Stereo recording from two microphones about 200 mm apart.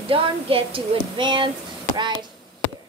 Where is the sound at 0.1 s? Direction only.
25° right (ahead or behind).